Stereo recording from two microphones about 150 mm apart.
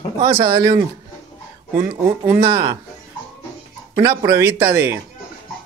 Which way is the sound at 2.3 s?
30° right (ahead or behind).